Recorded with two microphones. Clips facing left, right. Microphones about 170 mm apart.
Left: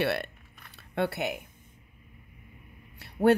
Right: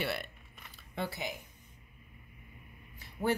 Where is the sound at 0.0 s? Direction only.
65° left (ahead or behind).